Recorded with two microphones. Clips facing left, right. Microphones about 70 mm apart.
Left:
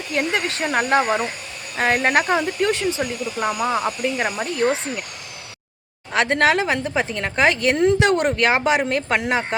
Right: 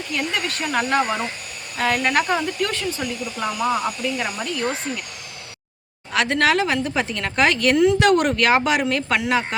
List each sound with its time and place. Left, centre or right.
0.1 s speech: left
6.1 s speech: left